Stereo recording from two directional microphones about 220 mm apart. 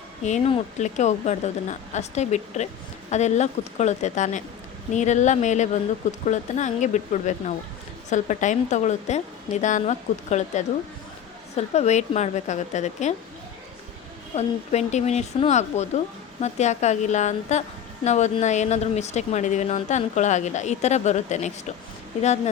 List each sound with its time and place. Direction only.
0.2 s speech: 30° left (ahead or behind)
14.3 s speech: 30° left (ahead or behind)